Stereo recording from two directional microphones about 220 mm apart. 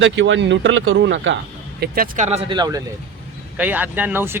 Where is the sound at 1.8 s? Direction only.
40° right (ahead or behind); by 2.8 s 20° right (ahead or behind).